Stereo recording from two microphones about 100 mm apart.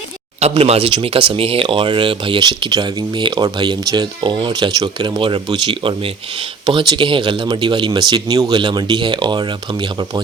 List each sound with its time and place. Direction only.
0.3 s speech: 85° right; by 1.6 s 70° right (ahead or behind)
1.6 s speech: 55° right (ahead or behind)